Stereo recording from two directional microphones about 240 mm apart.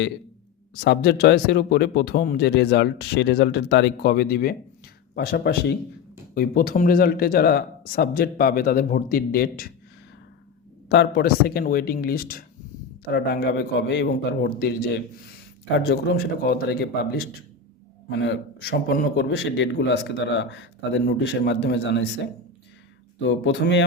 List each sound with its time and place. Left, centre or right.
0.7 s a man's voice: left
10.8 s a man's voice: left
23.2 s a man's voice: left